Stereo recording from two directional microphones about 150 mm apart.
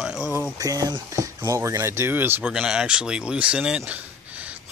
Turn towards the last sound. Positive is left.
turn(degrees=-10)  # may be behind; listen again after turning